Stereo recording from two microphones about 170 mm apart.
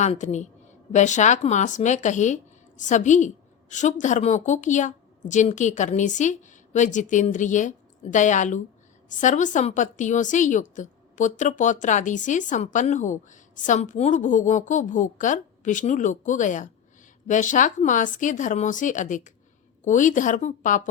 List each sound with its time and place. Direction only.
0.0 s speech: 45° left (ahead or behind)